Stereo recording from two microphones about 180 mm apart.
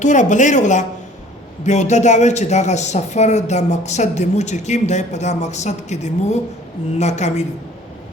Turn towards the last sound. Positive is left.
turn(degrees=40)  # may be behind; listen again after turning